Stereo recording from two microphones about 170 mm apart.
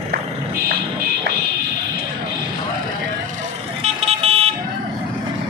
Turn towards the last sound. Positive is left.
turn(degrees=-35)  # may be behind; listen again after turning